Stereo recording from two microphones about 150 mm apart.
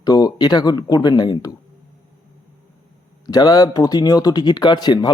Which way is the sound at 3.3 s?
25° left (ahead or behind).